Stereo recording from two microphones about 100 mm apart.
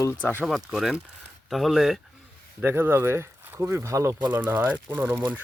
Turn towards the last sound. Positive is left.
turn(degrees=-20)  # may be behind; listen again after turning